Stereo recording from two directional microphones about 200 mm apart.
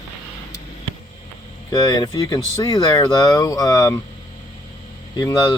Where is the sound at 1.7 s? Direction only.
20° left (ahead or behind).